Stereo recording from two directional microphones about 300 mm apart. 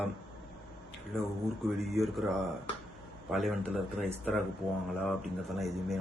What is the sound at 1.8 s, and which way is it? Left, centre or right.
A man's voice, centre.